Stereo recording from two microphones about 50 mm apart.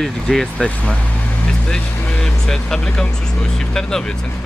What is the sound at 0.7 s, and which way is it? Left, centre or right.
Vehicle, left.